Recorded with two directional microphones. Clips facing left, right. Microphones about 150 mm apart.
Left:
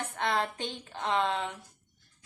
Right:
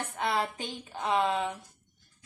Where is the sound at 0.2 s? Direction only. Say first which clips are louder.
Even; 5° right (ahead or behind).